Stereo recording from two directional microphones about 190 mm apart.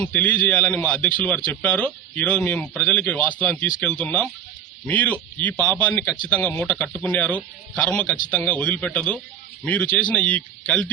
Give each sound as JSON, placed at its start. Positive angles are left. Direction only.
{"t": 0.0, "sound": "speech", "side_deg": 10}